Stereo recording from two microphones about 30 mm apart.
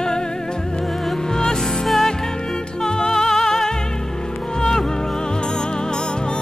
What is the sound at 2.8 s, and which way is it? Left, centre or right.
Music, left.